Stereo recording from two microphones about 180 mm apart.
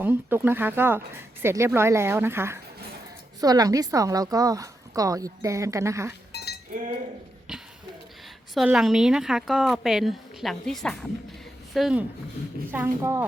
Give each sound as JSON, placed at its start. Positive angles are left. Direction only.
{"t": 0.0, "sound": "a woman's voice", "side_deg": -10}
{"t": 6.3, "sound": "goat", "side_deg": 65}
{"t": 7.5, "sound": "a sound", "side_deg": -5}
{"t": 8.5, "sound": "a woman's voice", "side_deg": -5}